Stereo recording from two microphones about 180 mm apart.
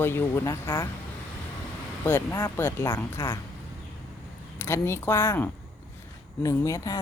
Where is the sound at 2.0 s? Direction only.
15° left (ahead or behind).